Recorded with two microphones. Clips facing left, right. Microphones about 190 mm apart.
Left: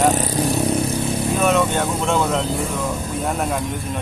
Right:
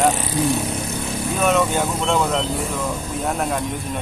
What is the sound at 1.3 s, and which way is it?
Speech, centre (ahead or behind).